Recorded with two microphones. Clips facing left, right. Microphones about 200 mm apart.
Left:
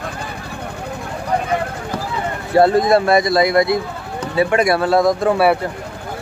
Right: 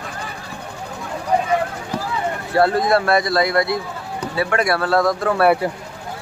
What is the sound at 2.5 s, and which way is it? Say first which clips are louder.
A man's voice: left 4 dB; 20° left (ahead or behind).